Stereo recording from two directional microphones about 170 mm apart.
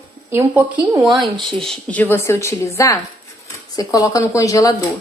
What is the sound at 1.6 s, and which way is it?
A woman's voice, 5° left (ahead or behind).